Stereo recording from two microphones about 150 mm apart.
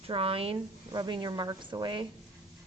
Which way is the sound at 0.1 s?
40° right (ahead or behind).